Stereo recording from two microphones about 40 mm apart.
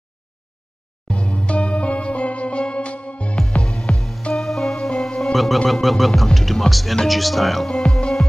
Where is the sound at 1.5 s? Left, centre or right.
Left.